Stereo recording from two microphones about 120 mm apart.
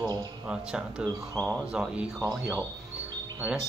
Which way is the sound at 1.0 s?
30° right (ahead or behind).